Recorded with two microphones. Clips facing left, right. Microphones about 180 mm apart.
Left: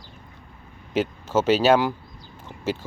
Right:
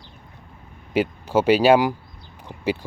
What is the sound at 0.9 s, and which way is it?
Speech, 10° right (ahead or behind).